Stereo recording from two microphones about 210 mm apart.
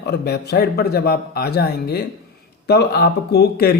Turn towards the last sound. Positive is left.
turn(degrees=50)  # may be behind; listen again after turning